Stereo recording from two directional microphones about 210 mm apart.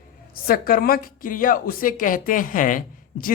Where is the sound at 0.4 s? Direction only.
45° left (ahead or behind).